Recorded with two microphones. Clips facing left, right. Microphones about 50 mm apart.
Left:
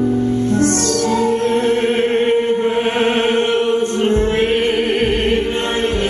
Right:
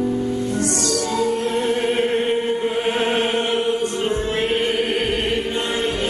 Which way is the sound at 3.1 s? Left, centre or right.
Left.